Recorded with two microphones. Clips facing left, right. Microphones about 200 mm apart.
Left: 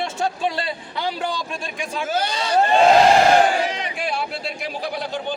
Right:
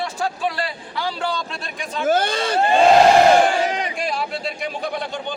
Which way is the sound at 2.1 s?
50° right (ahead or behind).